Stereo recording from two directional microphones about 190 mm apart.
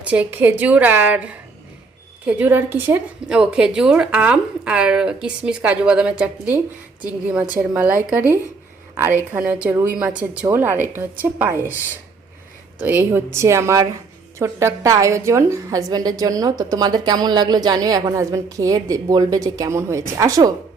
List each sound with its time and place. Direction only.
0.0 s a woman's voice: 10° right (ahead or behind)